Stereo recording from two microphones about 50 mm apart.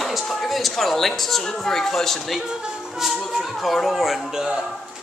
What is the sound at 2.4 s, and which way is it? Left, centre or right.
Speech, centre.